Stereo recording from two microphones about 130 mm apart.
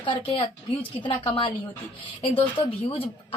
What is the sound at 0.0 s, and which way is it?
A woman's voice, 40° left (ahead or behind).